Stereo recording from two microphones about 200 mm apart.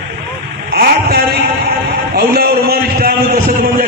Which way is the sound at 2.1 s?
50° right (ahead or behind).